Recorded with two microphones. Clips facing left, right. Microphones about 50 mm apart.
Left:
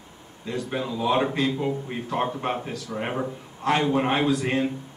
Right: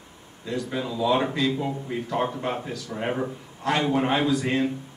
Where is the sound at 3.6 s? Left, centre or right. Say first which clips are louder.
Left 1 dB; left.